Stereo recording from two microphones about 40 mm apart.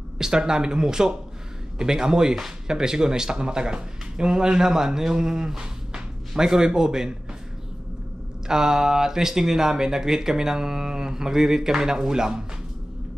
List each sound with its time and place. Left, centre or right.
0.2 s speech: centre
8.5 s speech: centre